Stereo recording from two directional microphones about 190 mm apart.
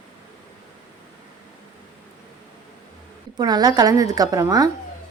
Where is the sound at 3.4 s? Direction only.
20° right (ahead or behind).